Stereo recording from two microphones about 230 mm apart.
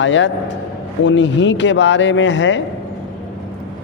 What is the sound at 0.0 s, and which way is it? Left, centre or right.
Speech, left.